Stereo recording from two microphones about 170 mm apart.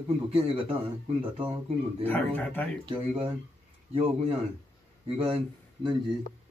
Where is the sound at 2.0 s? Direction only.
10° left (ahead or behind).